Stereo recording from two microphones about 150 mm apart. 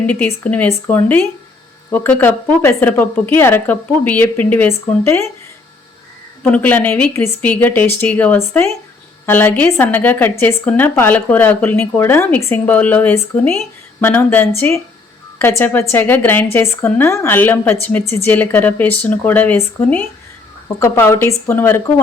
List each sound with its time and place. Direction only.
0.0 s a woman's voice: 10° left (ahead or behind)
6.4 s a woman's voice: 10° left (ahead or behind)